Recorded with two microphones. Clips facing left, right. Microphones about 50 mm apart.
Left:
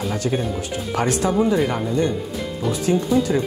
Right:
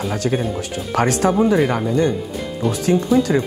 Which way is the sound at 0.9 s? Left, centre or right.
Right.